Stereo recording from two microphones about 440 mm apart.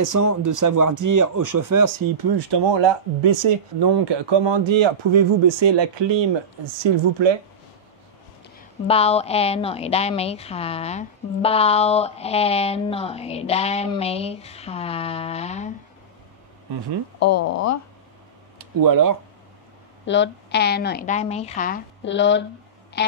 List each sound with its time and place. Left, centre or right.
0.0 s speech: right
2.3 s speech: right
3.8 s speech: right
6.9 s speech: right
8.8 s a woman's voice: centre
17.2 s speech: left
18.8 s speech: right
20.1 s a woman's voice: left
23.0 s a sound: left